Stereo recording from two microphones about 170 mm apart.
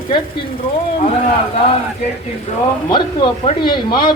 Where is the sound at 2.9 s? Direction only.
30° left (ahead or behind).